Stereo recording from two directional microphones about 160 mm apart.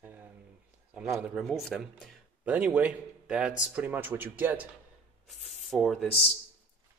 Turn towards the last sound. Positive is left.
turn(degrees=40)  # may be behind; listen again after turning